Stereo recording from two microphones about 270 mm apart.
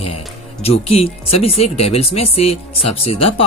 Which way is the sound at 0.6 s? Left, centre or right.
Left.